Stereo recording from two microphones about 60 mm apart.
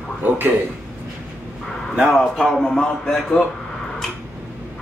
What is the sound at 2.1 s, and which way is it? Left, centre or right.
A man's voice, centre.